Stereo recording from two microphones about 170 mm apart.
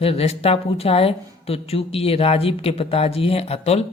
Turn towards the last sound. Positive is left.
turn(degrees=35)  # may be behind; listen again after turning